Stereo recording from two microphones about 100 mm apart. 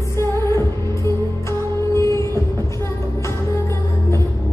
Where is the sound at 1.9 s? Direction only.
30° left (ahead or behind).